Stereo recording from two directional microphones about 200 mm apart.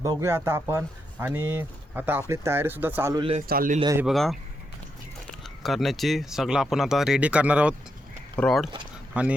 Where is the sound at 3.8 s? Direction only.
15° right (ahead or behind).